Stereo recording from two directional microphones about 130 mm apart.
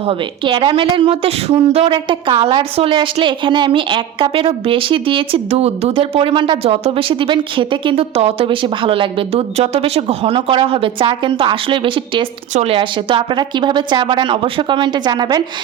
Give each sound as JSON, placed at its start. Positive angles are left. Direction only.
{"t": 0.0, "sound": "a woman's voice", "side_deg": -45}